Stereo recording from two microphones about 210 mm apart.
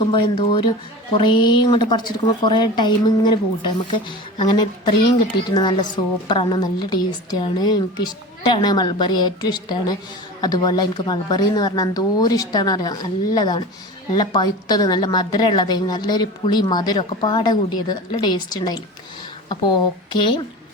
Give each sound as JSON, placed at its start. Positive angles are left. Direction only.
{"t": 0.1, "sound": "a woman's voice", "side_deg": 25}
{"t": 20.1, "sound": "a woman's voice", "side_deg": 25}